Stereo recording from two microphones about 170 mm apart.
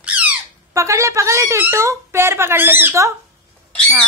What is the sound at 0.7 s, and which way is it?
A woman's voice, 20° right (ahead or behind).